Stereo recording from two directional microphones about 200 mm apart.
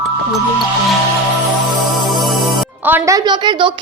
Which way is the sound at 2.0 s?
Centre (ahead or behind).